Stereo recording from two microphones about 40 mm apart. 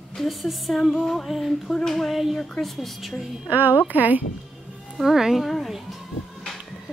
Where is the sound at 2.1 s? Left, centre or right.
Centre.